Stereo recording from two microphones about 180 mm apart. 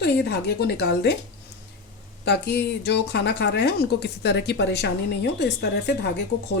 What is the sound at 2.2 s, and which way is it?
Speech, 65° left (ahead or behind).